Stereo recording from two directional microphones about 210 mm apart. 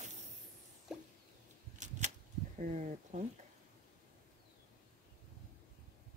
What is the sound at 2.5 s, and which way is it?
Speech, 35° right (ahead or behind).